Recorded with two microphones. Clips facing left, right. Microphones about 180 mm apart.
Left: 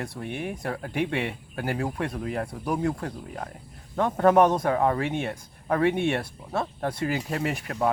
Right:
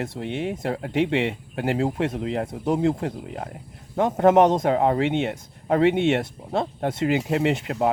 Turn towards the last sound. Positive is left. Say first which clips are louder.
# right 6 dB
turn(degrees=-20)  # may be behind; listen again after turning